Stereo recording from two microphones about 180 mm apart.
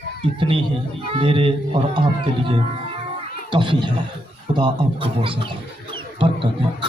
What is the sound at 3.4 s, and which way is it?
Speech, 25° right (ahead or behind).